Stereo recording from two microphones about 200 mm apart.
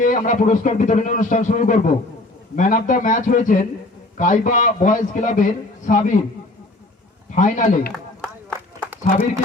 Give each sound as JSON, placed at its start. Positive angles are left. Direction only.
{"t": 0.0, "sound": "a man's voice", "side_deg": 40}
{"t": 7.3, "sound": "a man's voice", "side_deg": 40}
{"t": 8.2, "sound": "a sound", "side_deg": 5}